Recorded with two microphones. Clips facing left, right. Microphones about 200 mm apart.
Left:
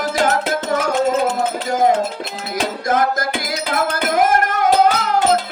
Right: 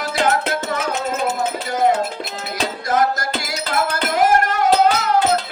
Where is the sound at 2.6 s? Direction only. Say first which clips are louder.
Left 1 dB; 50° left (ahead or behind).